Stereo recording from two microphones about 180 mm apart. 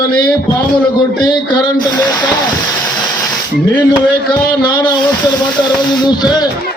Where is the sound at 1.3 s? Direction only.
25° left (ahead or behind).